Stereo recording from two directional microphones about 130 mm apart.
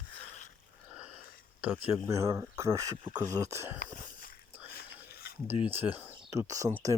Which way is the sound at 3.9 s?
90° left.